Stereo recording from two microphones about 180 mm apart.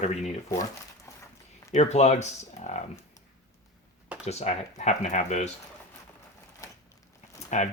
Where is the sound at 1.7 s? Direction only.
40° left (ahead or behind).